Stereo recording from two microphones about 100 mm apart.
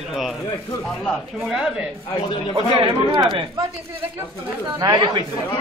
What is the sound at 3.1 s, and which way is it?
Speech, 60° right (ahead or behind).